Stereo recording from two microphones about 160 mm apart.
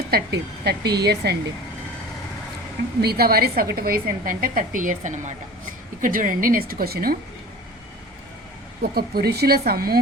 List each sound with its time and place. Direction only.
0.1 s a woman's voice: 90° right
3.0 s a woman's voice: 80° right
8.8 s a woman's voice: 70° right (ahead or behind)